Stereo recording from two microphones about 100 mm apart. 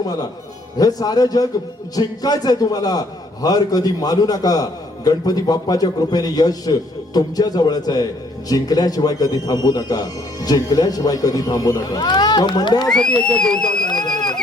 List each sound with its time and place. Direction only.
0.0 s a man's voice: 40° left (ahead or behind)
12.9 s speech: 10° left (ahead or behind)
13.8 s a sound: 45° left (ahead or behind)